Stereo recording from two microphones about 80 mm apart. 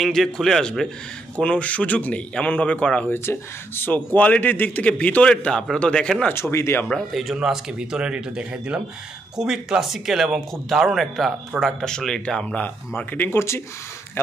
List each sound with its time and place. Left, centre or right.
0.0 s speech: centre
3.1 s speech: left; by 6.2 s centre
6.3 s speech: left
7.3 s speech: centre
12.6 s speech: left